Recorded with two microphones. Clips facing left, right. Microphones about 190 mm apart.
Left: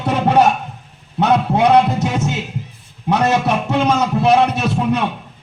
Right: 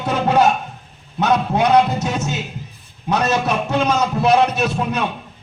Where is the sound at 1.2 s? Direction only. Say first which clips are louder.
Left 2 dB; 25° left (ahead or behind).